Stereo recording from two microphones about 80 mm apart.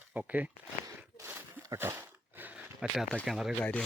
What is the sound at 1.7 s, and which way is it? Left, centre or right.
Speech, right.